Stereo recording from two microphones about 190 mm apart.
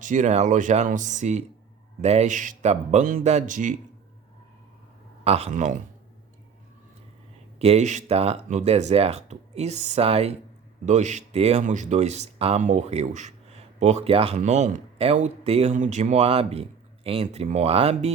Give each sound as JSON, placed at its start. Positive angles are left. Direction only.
{"t": 0.0, "sound": "speech", "side_deg": -40}
{"t": 5.2, "sound": "speech", "side_deg": -35}
{"t": 7.6, "sound": "speech", "side_deg": -35}